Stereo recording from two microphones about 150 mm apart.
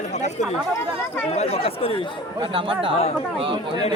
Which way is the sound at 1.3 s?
45° left (ahead or behind).